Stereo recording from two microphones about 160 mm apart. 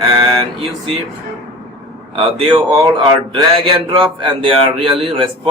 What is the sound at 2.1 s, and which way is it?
Speech, 35° right (ahead or behind).